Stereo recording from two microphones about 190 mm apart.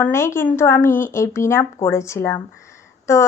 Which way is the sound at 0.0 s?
15° left (ahead or behind).